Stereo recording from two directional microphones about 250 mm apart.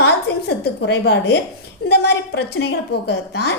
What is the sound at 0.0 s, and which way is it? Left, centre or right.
A woman's voice, left.